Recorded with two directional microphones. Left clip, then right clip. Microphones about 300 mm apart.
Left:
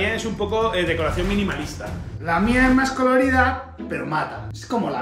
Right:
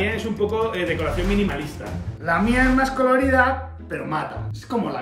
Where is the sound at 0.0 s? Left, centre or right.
Centre.